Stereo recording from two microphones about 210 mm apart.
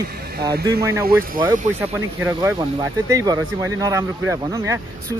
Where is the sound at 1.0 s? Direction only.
45° right (ahead or behind).